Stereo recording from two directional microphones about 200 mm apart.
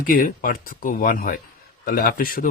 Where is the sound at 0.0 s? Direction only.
45° left (ahead or behind).